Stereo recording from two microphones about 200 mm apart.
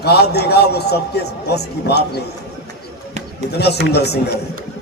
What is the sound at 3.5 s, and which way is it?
Speech, 55° left (ahead or behind).